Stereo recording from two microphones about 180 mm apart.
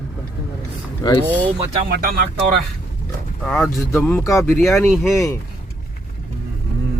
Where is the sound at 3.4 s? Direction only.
5° left (ahead or behind).